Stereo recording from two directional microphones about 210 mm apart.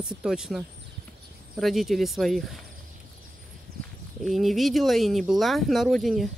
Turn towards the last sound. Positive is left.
turn(degrees=0)  # may be behind; listen again after turning